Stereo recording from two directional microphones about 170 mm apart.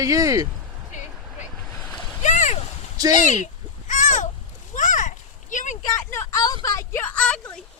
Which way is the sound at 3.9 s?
45° left (ahead or behind).